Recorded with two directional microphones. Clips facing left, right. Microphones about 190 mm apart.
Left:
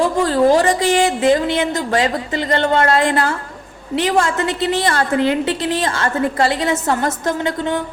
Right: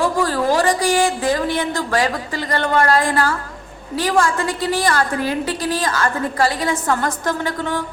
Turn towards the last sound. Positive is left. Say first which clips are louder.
# left 3 dB
turn(degrees=20)  # may be behind; listen again after turning